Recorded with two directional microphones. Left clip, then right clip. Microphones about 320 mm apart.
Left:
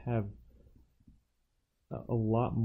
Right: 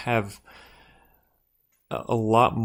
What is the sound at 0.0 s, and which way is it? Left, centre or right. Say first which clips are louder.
Speech: right 12 dB; centre.